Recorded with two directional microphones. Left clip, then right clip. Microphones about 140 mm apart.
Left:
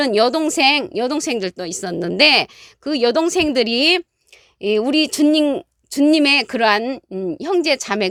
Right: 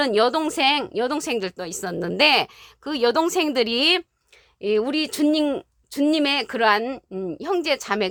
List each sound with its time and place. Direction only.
0.0 s a woman's voice: 35° left (ahead or behind)
5.9 s a woman's voice: 40° left (ahead or behind)